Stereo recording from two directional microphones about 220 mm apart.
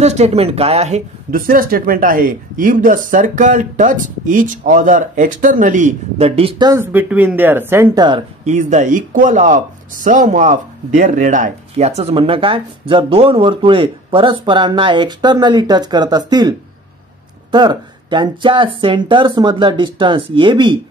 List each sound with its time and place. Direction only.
0.0 s speech: 30° right (ahead or behind)
6.7 s speech: 10° right (ahead or behind)
8.5 s speech: 35° right (ahead or behind)